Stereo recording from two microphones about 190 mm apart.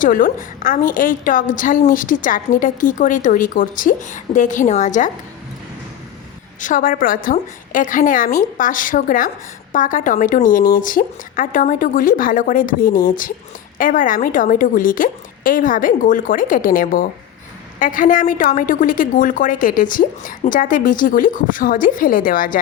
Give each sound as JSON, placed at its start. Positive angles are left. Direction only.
{"t": 0.0, "sound": "a woman's voice", "side_deg": 45}
{"t": 6.6, "sound": "a woman's voice", "side_deg": 45}